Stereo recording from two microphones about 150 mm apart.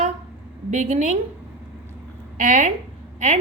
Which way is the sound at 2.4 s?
55° right (ahead or behind).